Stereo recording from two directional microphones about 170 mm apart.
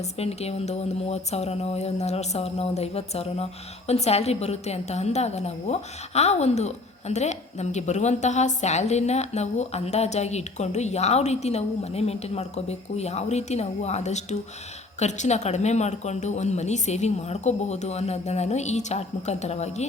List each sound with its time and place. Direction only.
0.0 s speech: 40° left (ahead or behind)